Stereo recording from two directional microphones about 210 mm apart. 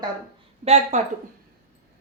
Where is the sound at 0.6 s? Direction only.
30° right (ahead or behind).